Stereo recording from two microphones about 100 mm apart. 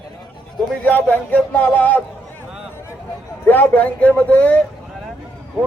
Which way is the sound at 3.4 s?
15° left (ahead or behind).